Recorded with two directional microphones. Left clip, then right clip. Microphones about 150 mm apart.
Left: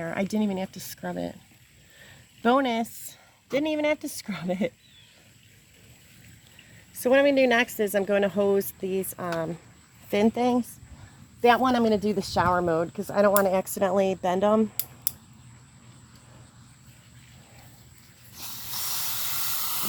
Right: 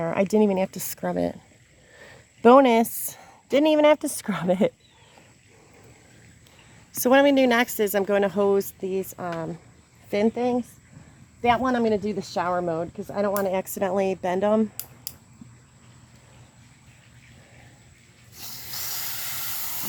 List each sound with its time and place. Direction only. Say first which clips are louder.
0.0 s a woman's voice: right 8 dB; 50° right (ahead or behind)
7.0 s speech: right 2 dB; 55° right (ahead or behind)
7.5 s a woman's voice: right 1 dB; 35° right (ahead or behind); by 10.6 s 15° right (ahead or behind)
11.6 s speech: even; 5° right (ahead or behind)
13.5 s speech: left 1 dB; 15° right (ahead or behind)
18.7 s hiss: left 1 dB; 10° right (ahead or behind)